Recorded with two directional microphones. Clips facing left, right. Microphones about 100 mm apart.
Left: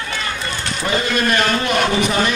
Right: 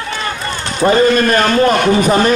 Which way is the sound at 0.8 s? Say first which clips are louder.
Right 9 dB; 40° right (ahead or behind).